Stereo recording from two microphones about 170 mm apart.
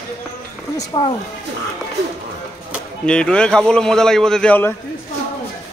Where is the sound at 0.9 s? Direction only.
30° left (ahead or behind).